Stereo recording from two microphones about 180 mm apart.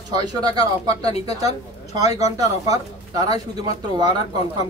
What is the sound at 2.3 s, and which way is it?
Speech, 20° right (ahead or behind).